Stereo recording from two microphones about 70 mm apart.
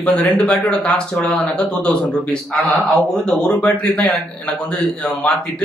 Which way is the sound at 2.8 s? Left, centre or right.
Centre.